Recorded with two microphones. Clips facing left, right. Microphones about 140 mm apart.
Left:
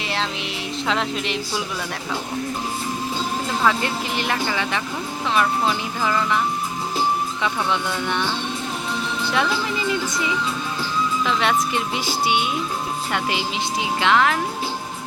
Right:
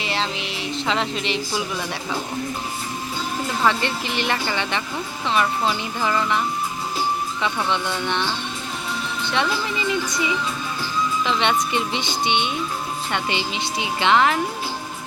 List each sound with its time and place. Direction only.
0.0 s speech: centre (ahead or behind)
3.6 s speech: centre (ahead or behind)
7.4 s speech: centre (ahead or behind)